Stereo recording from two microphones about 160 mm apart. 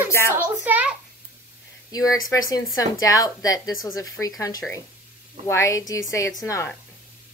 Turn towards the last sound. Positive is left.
turn(degrees=20)  # may be behind; listen again after turning